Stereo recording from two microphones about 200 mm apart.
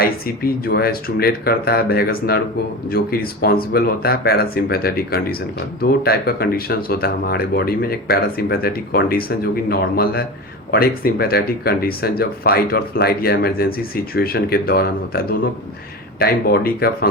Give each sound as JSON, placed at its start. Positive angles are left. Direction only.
{"t": 0.0, "sound": "speech", "side_deg": 50}